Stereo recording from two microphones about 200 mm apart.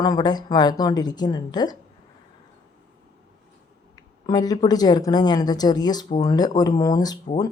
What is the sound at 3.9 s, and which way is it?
A woman's voice, 20° left (ahead or behind).